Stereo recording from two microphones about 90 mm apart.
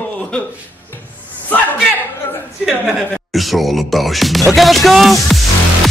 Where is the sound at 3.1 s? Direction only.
Centre (ahead or behind).